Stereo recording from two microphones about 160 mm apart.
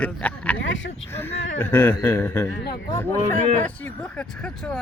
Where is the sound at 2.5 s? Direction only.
80° left.